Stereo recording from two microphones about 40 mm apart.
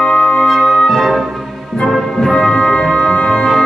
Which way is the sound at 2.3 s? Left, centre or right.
Centre.